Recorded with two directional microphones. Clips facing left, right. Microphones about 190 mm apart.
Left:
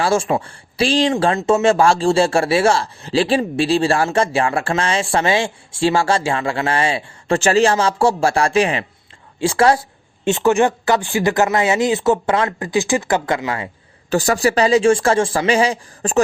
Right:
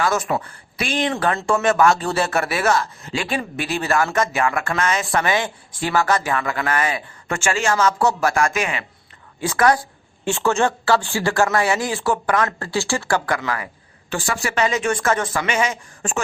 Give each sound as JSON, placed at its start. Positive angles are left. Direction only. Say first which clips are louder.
{"t": 0.0, "sound": "speech", "louder": "left 4 dB", "side_deg": 30}
{"t": 14.1, "sound": "speech", "louder": "left 8 dB", "side_deg": 40}